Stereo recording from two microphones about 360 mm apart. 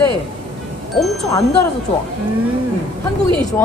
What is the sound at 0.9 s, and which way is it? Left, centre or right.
Speech, centre.